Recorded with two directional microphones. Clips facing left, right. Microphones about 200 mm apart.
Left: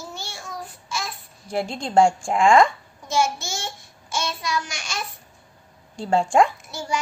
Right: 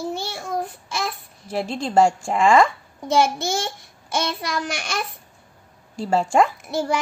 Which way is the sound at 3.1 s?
60° right (ahead or behind).